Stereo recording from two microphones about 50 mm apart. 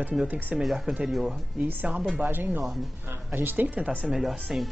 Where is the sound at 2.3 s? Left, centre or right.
Right.